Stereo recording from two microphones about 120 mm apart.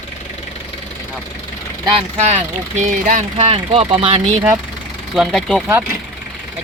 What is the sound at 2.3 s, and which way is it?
Speech, 70° right (ahead or behind).